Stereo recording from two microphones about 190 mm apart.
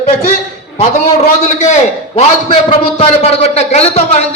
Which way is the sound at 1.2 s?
40° left (ahead or behind).